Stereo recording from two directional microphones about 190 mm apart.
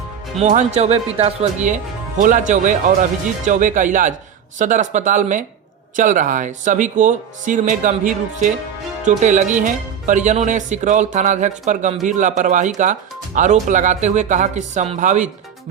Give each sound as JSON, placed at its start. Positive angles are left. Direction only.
{"t": 0.3, "sound": "speech", "side_deg": -35}